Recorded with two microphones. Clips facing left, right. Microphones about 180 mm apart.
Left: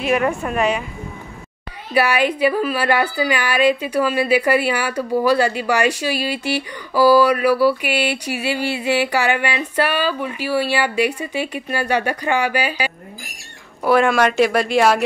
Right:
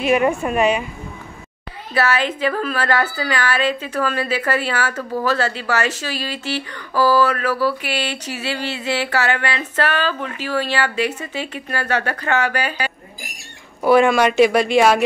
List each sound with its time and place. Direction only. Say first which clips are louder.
0.0 s speech: right 2 dB; 5° right (ahead or behind)
2.0 s a woman's voice: left 3 dB; 15° left (ahead or behind)
13.8 s speech: right 2 dB; centre (ahead or behind)